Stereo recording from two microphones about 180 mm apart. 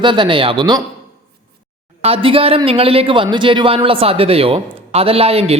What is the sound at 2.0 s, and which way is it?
Speech, 30° right (ahead or behind).